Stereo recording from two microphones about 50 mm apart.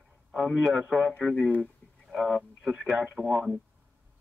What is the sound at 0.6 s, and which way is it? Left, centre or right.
Speech, centre.